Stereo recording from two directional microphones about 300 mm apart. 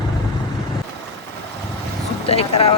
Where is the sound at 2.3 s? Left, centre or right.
Centre.